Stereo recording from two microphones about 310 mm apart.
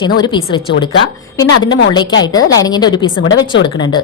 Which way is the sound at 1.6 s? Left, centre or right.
Centre.